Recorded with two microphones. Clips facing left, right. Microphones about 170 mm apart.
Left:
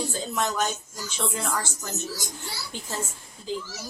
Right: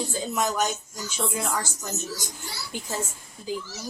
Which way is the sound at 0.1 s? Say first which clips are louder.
Right 1 dB; 10° right (ahead or behind).